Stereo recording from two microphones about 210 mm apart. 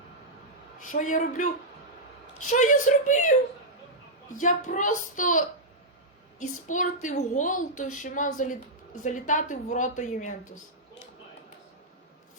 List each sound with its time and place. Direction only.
0.8 s a woman's voice: 40° left (ahead or behind)
4.4 s a woman's voice: 35° left (ahead or behind)